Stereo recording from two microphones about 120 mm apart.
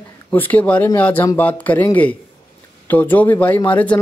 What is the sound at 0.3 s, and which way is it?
Speech, 15° left (ahead or behind).